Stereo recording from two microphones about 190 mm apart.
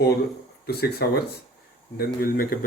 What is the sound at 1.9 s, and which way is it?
Speech, 50° left (ahead or behind).